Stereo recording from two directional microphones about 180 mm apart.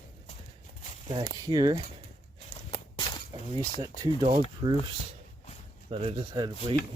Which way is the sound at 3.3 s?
25° right (ahead or behind).